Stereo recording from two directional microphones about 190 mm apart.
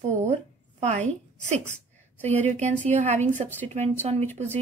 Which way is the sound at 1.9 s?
10° left (ahead or behind).